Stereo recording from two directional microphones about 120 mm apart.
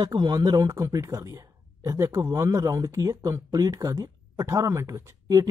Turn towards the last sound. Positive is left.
turn(degrees=-25)  # may be behind; listen again after turning